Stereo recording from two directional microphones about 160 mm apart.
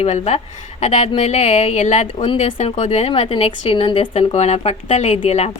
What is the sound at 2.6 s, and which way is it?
Speech, 45° left (ahead or behind).